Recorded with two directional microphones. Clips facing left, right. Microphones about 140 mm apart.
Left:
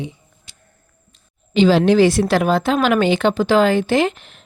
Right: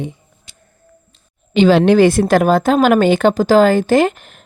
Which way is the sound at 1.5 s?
60° right (ahead or behind).